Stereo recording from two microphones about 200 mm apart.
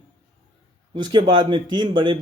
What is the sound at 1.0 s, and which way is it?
A man's voice, 20° right (ahead or behind).